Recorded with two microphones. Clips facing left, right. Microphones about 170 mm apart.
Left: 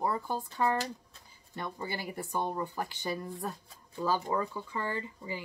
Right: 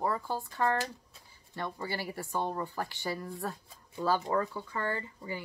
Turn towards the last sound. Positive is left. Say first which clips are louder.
# even
turn(degrees=15)  # may be behind; listen again after turning